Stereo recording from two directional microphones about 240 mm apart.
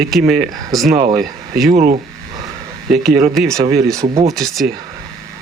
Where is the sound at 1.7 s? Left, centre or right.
Right.